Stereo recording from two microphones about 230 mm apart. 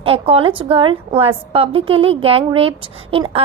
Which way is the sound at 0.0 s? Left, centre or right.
Right.